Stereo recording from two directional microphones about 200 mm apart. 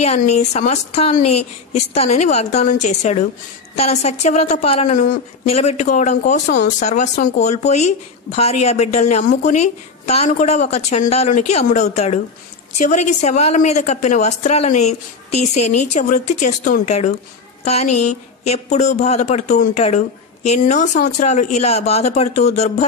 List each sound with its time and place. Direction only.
0.0 s a woman's voice: 35° left (ahead or behind)